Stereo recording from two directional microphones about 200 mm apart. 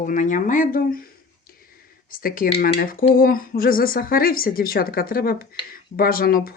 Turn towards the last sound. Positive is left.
turn(degrees=45)  # may be behind; listen again after turning